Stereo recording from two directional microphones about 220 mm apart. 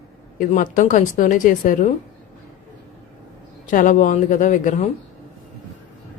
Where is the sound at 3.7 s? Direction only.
35° left (ahead or behind).